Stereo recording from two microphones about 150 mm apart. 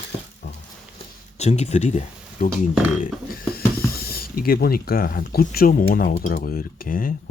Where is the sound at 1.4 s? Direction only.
45° left (ahead or behind).